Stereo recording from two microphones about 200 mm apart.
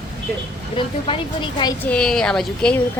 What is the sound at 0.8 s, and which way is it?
Speech, 25° left (ahead or behind).